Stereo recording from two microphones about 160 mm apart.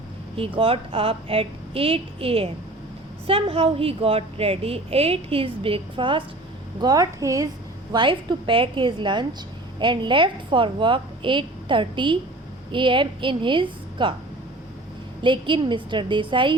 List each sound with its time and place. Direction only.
0.3 s a woman's voice: 35° right (ahead or behind)
7.9 s a woman's voice: 30° right (ahead or behind)
15.2 s a woman's voice: 30° right (ahead or behind)